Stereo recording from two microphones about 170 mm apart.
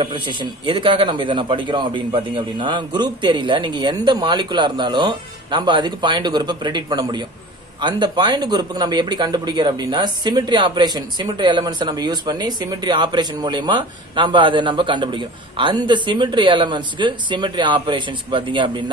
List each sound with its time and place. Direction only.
0.0 s a man's voice: 30° right (ahead or behind)